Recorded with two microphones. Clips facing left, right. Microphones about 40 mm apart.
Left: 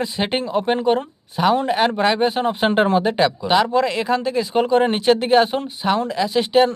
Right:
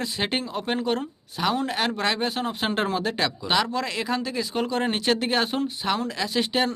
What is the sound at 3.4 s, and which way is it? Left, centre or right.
Speech, centre.